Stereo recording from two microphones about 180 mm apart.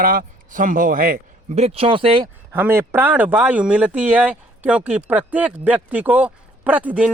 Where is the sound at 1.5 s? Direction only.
35° right (ahead or behind).